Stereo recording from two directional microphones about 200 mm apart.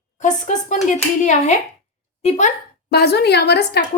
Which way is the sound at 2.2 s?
35° left (ahead or behind).